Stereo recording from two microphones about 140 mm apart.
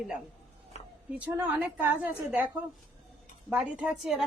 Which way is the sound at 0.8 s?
50° left (ahead or behind).